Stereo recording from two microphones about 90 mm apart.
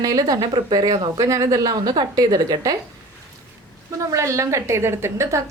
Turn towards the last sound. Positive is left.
turn(degrees=-30)  # may be behind; listen again after turning